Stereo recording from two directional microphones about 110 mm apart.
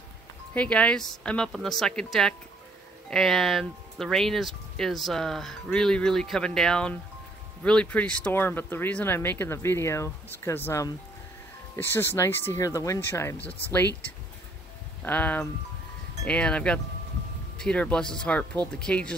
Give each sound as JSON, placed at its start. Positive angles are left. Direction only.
{"t": 0.6, "sound": "speech", "side_deg": 10}
{"t": 15.0, "sound": "speech", "side_deg": 15}